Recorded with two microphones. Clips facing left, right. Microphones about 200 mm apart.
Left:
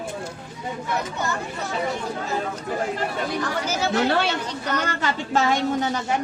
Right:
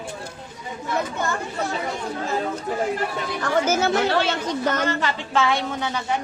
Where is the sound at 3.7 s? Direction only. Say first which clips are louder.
Left 1 dB; 50° right (ahead or behind).